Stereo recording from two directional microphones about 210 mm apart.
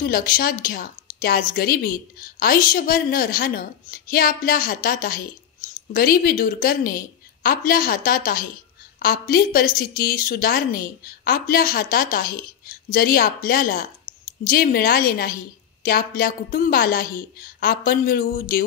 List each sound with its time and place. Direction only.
0.0 s a woman's voice: 45° left (ahead or behind)